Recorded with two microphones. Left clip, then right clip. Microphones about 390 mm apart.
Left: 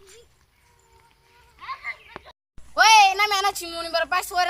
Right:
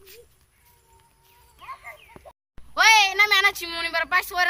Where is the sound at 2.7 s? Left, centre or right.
Centre.